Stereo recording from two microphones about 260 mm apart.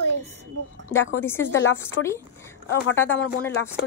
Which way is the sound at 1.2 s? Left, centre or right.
Centre.